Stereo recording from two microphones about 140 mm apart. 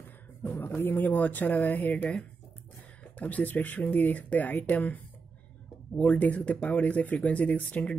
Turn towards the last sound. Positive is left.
turn(degrees=10)  # may be behind; listen again after turning